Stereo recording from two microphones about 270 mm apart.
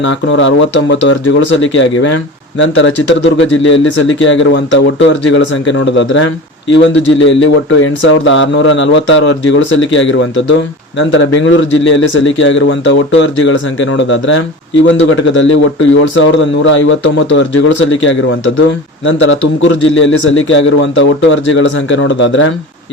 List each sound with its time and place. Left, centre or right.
0.1 s a man's voice: left